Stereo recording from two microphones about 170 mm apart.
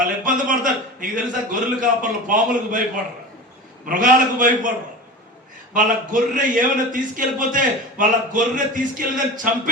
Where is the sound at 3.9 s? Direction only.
50° right (ahead or behind).